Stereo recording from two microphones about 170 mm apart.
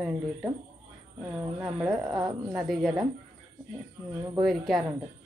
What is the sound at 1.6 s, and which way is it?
Speech, 5° right (ahead or behind).